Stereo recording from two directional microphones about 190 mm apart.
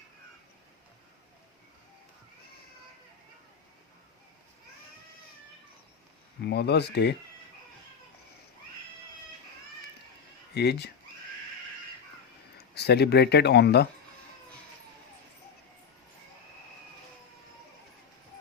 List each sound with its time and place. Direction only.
6.4 s speech: 60° left (ahead or behind)
10.5 s speech: 60° left (ahead or behind)
12.7 s speech: 60° left (ahead or behind)